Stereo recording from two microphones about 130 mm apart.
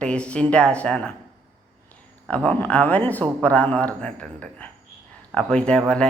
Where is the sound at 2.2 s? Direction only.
10° left (ahead or behind).